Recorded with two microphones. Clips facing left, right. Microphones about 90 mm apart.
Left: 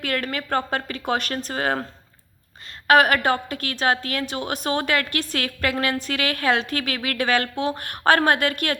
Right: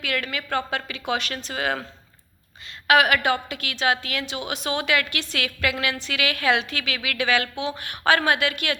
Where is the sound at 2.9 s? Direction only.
40° left (ahead or behind).